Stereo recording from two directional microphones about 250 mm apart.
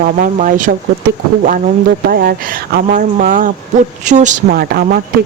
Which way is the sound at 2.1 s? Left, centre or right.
Right.